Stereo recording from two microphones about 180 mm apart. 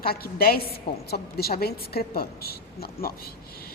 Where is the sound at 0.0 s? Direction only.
55° left (ahead or behind).